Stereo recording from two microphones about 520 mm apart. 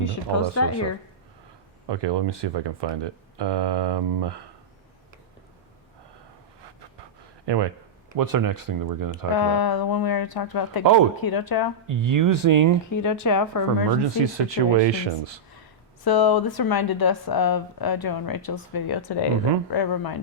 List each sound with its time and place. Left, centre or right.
0.0 s speech: left
1.9 s speech: right
7.4 s speech: right
8.1 s speech: right
9.3 s speech: left
11.9 s speech: right
13.2 s speech: left
14.2 s speech: right
16.0 s speech: left